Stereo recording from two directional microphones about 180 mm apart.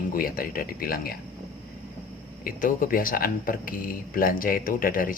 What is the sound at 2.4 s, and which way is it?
Speech, 50° left (ahead or behind).